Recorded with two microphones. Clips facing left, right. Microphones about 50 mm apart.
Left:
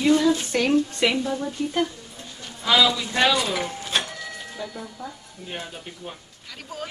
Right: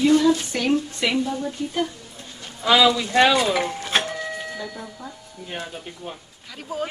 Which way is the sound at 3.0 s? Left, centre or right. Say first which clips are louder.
Right 4 dB; right.